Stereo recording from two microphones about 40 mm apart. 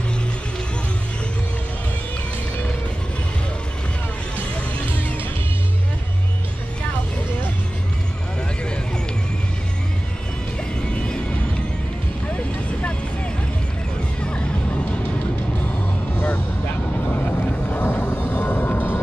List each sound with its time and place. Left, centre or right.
12.3 s vehicle: left
17.1 s vehicle: left
17.8 s vehicle: left
18.3 s music: left